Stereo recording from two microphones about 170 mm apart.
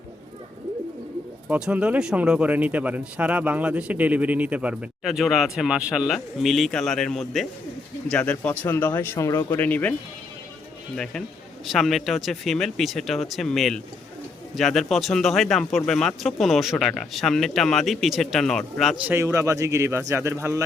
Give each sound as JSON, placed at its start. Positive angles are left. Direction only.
{"t": 1.5, "sound": "a man's voice", "side_deg": -5}
{"t": 10.9, "sound": "speech", "side_deg": 0}
{"t": 19.1, "sound": "a man's voice", "side_deg": -15}